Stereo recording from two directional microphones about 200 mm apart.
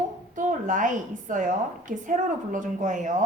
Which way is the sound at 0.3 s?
40° right (ahead or behind).